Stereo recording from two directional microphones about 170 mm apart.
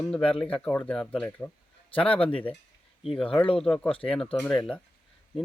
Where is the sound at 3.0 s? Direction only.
Centre (ahead or behind).